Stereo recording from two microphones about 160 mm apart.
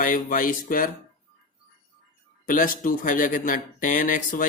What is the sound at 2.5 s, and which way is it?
Speech, 60° left (ahead or behind).